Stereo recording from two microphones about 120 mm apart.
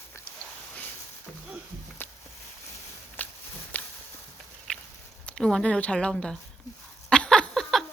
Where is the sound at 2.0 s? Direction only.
15° left (ahead or behind).